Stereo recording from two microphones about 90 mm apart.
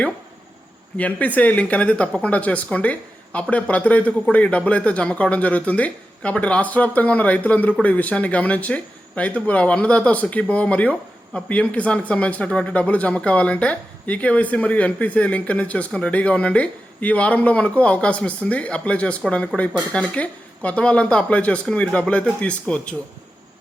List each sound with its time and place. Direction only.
0.9 s speech: 15° left (ahead or behind)